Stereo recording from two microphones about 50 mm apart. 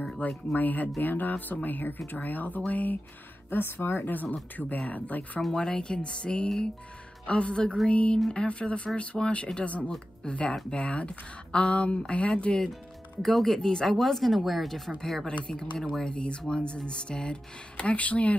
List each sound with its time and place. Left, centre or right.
0.2 s speech: left
3.4 s speech: left
4.1 s speech: left
5.4 s speech: centre
13.2 s speech: centre
15.2 s speech: centre